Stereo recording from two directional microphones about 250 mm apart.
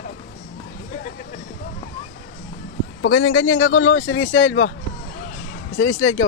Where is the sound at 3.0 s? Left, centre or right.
Left.